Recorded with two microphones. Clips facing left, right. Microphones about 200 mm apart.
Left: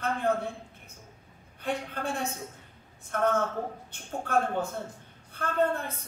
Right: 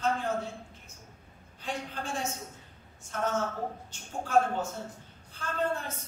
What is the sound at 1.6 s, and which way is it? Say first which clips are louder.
A woman's voice: left 4 dB; 60° left (ahead or behind).